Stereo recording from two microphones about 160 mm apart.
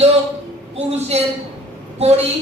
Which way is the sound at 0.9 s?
40° right (ahead or behind).